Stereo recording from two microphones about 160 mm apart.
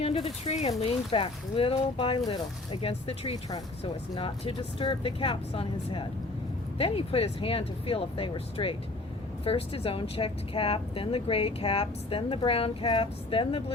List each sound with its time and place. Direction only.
0.0 s speech: 40° left (ahead or behind)